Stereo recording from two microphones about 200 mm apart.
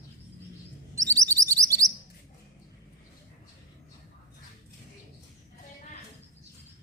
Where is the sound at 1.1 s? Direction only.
15° right (ahead or behind).